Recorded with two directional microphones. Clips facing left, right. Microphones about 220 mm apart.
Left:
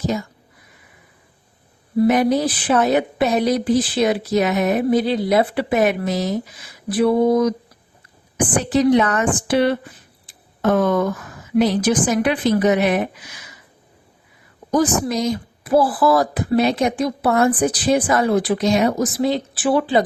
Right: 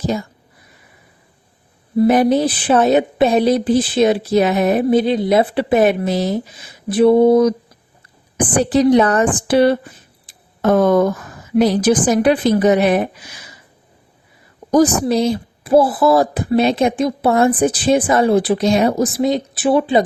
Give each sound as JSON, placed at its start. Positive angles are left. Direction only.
{"t": 0.0, "sound": "a woman's voice", "side_deg": -30}
{"t": 2.0, "sound": "speech", "side_deg": -30}
{"t": 8.5, "sound": "a woman's voice", "side_deg": -35}
{"t": 15.0, "sound": "speech", "side_deg": -30}